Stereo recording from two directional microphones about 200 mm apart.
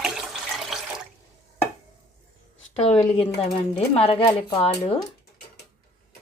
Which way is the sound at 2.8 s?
30° left (ahead or behind).